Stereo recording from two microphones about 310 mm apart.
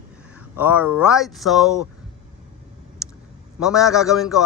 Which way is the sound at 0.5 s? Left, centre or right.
Centre.